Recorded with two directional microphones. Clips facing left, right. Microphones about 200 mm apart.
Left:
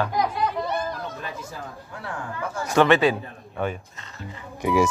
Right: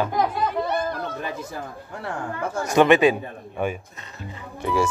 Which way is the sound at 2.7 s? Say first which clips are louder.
Right 2 dB; 15° right (ahead or behind).